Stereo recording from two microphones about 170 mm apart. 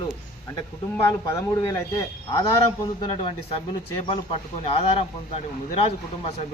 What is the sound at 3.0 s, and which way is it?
Speech, 30° left (ahead or behind).